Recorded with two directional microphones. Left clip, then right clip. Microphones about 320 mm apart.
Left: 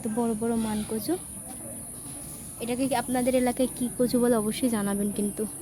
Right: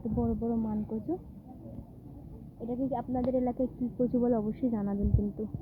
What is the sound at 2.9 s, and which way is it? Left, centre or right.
Speech, left.